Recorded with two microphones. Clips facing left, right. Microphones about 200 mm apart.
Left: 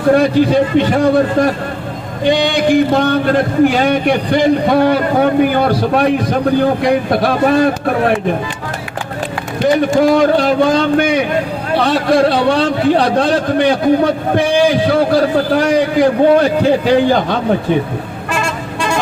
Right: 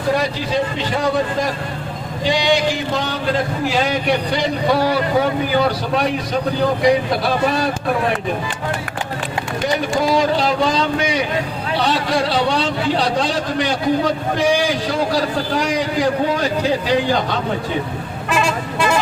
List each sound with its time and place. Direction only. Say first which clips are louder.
0.1 s a man's voice: left 9 dB; 55° left (ahead or behind)
9.9 s a man's voice: left 5 dB; 55° left (ahead or behind)
18.3 s vehicle: right 1 dB; centre (ahead or behind)